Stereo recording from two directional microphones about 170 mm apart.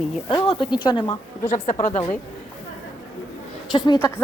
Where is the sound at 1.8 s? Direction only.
45° left (ahead or behind).